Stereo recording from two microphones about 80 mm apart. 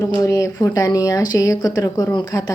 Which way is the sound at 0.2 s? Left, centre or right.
Left.